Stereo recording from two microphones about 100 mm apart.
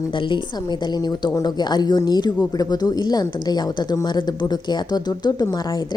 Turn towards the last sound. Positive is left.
turn(degrees=45)  # may be behind; listen again after turning